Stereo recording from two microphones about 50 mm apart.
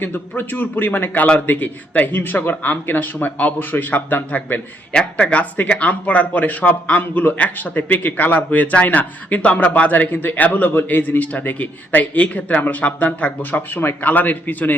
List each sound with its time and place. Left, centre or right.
0.0 s a man's voice: left